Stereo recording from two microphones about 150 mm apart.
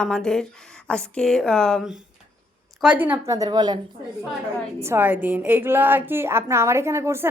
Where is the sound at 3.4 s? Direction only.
30° right (ahead or behind).